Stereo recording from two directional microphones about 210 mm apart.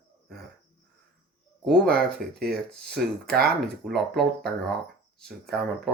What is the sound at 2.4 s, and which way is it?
Speech, 50° right (ahead or behind).